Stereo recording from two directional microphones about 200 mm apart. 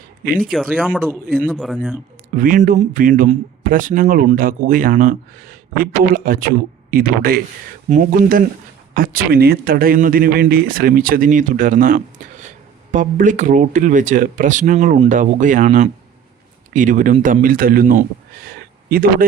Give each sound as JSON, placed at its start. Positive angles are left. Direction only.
{"t": 0.3, "sound": "speech", "side_deg": -45}
{"t": 0.5, "sound": "a man's voice", "side_deg": 0}
{"t": 1.5, "sound": "speech", "side_deg": 0}
{"t": 2.3, "sound": "speech", "side_deg": -45}